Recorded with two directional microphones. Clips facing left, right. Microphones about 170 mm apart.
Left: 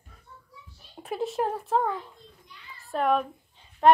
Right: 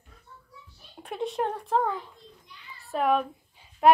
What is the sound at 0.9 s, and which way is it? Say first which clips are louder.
A woman's voice: left 2 dB; 5° left (ahead or behind).